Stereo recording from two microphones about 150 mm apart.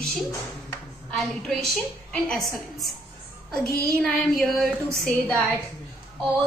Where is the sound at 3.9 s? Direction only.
Centre (ahead or behind).